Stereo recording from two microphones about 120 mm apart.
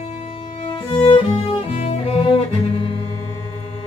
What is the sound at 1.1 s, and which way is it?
Music, 50° left (ahead or behind).